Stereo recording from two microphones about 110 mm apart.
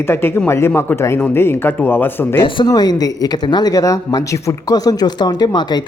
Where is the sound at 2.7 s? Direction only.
35° left (ahead or behind).